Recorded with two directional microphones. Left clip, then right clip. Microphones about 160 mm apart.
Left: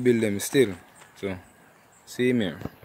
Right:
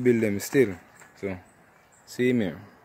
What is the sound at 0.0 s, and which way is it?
Speech, centre (ahead or behind).